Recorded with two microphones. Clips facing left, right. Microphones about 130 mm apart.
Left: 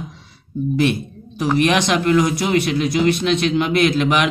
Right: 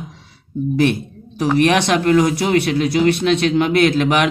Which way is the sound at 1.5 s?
55° right (ahead or behind).